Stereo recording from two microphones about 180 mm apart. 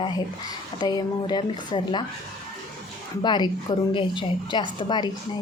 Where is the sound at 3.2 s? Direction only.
25° left (ahead or behind).